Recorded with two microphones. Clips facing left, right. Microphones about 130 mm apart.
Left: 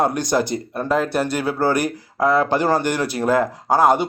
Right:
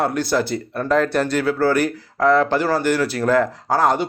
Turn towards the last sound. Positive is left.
turn(degrees=15)  # may be behind; listen again after turning